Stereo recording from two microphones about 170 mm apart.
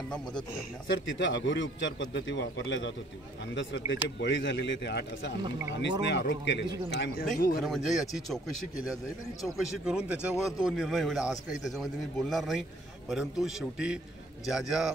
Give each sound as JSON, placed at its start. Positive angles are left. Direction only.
{"t": 0.8, "sound": "a man's voice", "side_deg": 90}
{"t": 7.3, "sound": "speech", "side_deg": 60}
{"t": 7.6, "sound": "a man's voice", "side_deg": 0}
{"t": 9.4, "sound": "a man's voice", "side_deg": -5}